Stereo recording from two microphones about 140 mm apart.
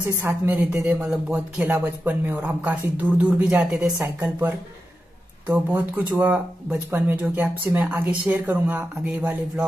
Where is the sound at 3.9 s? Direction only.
20° right (ahead or behind).